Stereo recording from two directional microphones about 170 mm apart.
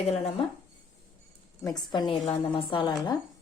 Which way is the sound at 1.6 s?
25° left (ahead or behind).